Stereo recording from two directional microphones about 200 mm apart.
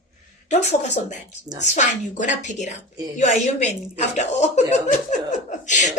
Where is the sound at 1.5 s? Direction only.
35° left (ahead or behind).